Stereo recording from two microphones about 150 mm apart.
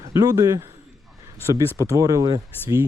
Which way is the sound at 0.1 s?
25° right (ahead or behind).